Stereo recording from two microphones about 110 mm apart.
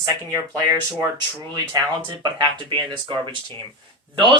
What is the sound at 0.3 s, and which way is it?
Speech, 25° right (ahead or behind).